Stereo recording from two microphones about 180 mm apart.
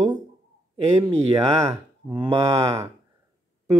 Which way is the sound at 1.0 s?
15° right (ahead or behind).